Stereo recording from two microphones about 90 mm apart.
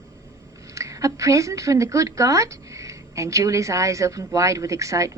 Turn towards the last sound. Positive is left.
turn(degrees=-35)  # may be behind; listen again after turning